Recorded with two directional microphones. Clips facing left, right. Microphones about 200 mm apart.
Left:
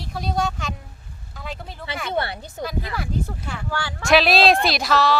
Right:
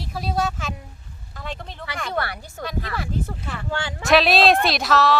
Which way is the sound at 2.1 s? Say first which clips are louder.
Left 3 dB; 25° left (ahead or behind).